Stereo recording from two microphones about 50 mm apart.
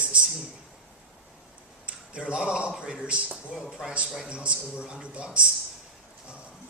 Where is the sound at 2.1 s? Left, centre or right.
Right.